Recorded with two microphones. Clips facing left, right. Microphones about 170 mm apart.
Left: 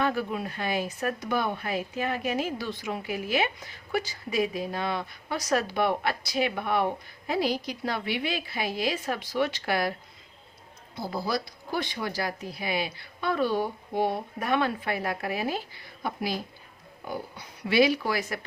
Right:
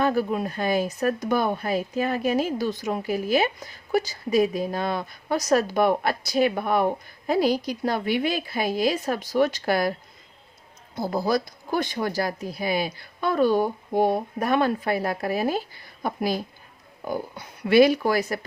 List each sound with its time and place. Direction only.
0.0 s speech: 40° right (ahead or behind)
10.9 s speech: 45° right (ahead or behind)